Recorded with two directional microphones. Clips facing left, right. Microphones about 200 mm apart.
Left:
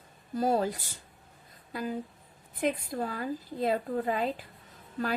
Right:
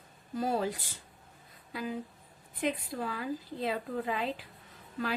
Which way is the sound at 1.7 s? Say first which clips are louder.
Left 3 dB; 45° left (ahead or behind).